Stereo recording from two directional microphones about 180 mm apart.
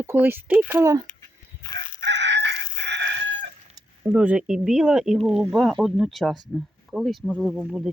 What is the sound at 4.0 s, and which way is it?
Speech, 5° right (ahead or behind).